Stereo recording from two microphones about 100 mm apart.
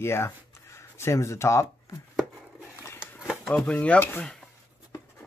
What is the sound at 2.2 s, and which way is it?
Chopping, 5° right (ahead or behind).